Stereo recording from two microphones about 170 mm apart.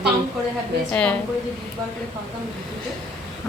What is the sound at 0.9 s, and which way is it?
Speech, 5° left (ahead or behind).